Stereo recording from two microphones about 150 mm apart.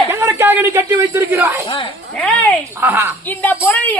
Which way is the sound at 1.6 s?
35° left (ahead or behind).